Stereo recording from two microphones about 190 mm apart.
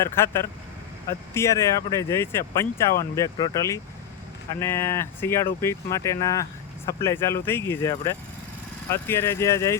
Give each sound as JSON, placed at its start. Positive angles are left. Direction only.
{"t": 0.0, "sound": "speech", "side_deg": 15}